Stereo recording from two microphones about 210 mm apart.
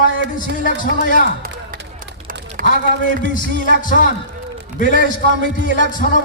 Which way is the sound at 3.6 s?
40° left (ahead or behind).